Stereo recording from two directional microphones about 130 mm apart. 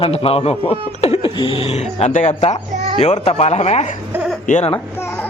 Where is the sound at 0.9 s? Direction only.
50° left (ahead or behind).